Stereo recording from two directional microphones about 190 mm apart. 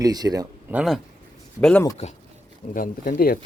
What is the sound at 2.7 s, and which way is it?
Speech, 45° left (ahead or behind).